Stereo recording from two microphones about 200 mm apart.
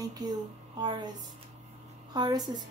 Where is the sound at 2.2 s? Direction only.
20° right (ahead or behind).